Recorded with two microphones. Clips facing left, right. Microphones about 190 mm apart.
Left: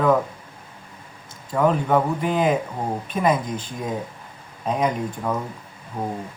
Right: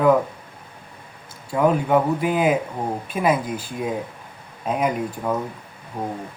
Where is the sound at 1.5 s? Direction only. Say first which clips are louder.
Right 1 dB; 10° right (ahead or behind).